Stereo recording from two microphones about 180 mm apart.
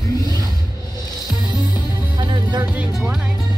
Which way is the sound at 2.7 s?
5° right (ahead or behind).